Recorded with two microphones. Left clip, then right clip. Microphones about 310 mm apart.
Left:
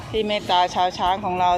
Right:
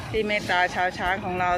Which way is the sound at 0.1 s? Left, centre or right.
Centre.